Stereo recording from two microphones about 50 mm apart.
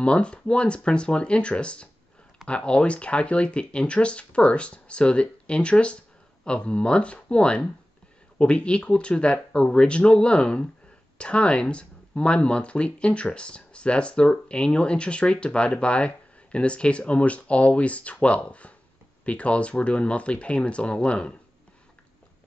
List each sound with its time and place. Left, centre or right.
0.0 s speech: left